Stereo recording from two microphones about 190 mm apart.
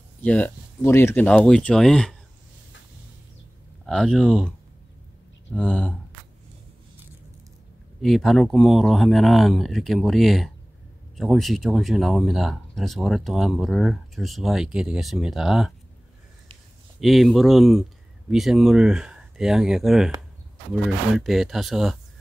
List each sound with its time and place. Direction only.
0.2 s speech: 5° left (ahead or behind)
3.8 s speech: centre (ahead or behind)
8.0 s speech: centre (ahead or behind)
17.0 s speech: centre (ahead or behind)